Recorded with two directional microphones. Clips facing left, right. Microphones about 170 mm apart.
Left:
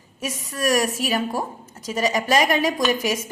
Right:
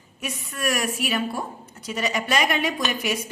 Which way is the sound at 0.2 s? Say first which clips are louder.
Left 4 dB; 40° left (ahead or behind).